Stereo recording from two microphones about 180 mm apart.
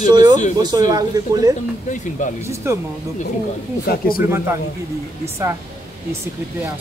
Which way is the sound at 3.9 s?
55° left (ahead or behind).